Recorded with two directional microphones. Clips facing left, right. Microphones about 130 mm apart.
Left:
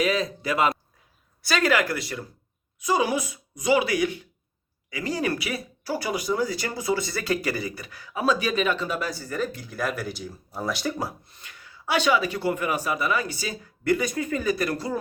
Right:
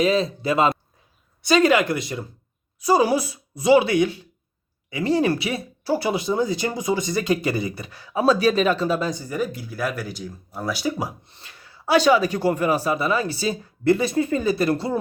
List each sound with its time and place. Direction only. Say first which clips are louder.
0.0 s speech: right 4 dB; 25° right (ahead or behind)
2.8 s speech: right 5 dB; 35° right (ahead or behind)
9.0 s speech: right 3 dB; 20° right (ahead or behind)
11.3 s speech: right 1 dB; 30° right (ahead or behind)